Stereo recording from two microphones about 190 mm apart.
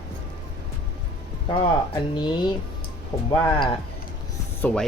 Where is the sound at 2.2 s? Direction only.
25° left (ahead or behind).